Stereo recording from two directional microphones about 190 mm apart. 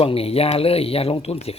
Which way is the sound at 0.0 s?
30° left (ahead or behind).